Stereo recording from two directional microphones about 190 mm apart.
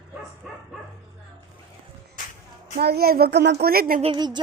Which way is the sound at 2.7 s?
55° right (ahead or behind).